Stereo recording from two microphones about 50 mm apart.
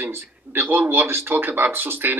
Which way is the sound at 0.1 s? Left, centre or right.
Right.